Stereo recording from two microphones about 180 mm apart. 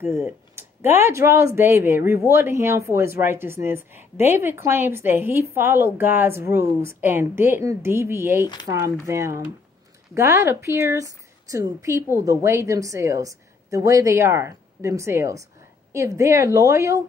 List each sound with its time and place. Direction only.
0.0 s a woman's voice: 15° right (ahead or behind)